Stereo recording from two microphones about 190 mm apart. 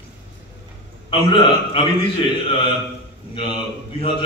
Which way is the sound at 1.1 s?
30° left (ahead or behind).